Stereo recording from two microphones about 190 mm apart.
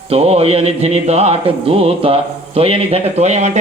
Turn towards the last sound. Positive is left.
turn(degrees=-35)  # may be behind; listen again after turning